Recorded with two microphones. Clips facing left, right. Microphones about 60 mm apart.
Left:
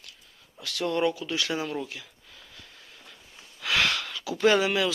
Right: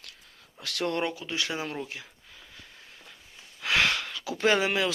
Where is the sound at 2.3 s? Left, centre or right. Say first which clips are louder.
Even; centre.